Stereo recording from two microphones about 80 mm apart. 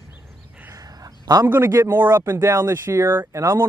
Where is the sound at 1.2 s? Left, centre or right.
Right.